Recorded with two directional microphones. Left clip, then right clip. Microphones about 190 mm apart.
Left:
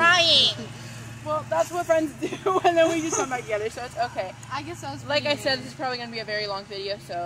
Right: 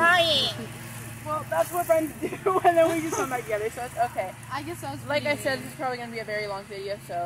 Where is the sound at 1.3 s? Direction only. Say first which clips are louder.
Left 2 dB; 35° left (ahead or behind).